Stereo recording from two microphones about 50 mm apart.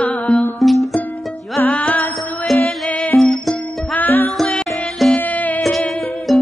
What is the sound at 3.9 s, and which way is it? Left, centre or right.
Music, left.